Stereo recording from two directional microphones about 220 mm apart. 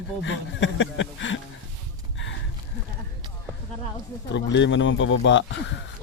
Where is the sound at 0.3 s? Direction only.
60° left (ahead or behind).